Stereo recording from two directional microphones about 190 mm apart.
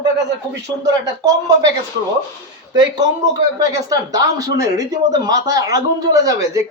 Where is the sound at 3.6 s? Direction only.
20° right (ahead or behind).